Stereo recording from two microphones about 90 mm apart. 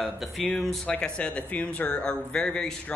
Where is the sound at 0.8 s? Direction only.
15° left (ahead or behind).